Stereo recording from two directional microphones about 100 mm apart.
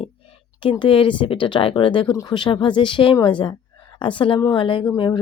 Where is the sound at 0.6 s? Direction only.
60° left (ahead or behind).